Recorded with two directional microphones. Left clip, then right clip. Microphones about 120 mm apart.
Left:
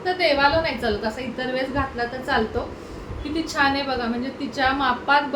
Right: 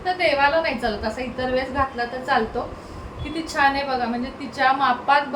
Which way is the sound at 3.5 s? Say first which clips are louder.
Right 2 dB; 10° left (ahead or behind).